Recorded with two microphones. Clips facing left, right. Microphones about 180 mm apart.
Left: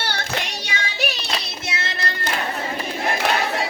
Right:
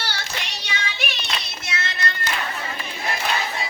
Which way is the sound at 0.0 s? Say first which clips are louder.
Left 5 dB; 55° left (ahead or behind).